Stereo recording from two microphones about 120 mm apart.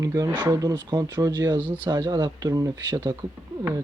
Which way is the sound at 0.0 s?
30° right (ahead or behind).